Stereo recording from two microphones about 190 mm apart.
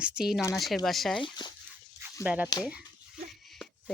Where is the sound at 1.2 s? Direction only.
25° left (ahead or behind).